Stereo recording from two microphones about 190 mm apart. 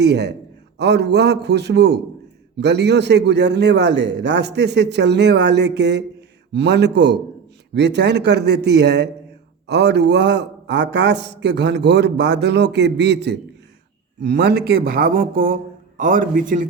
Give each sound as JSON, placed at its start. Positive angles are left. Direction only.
{"t": 0.0, "sound": "a man's voice", "side_deg": -60}